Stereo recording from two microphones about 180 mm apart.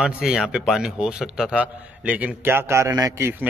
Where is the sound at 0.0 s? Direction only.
5° right (ahead or behind).